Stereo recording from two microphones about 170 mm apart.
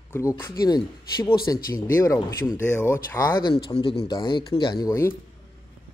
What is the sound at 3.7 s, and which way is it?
Speech, 35° left (ahead or behind).